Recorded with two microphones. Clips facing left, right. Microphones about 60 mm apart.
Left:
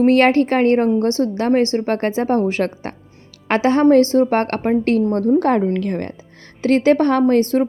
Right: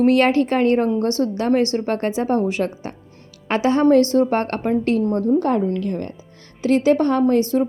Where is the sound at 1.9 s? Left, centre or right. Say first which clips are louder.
Left 2 dB; left.